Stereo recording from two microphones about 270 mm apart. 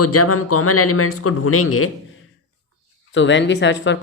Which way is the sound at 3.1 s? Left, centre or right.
Left.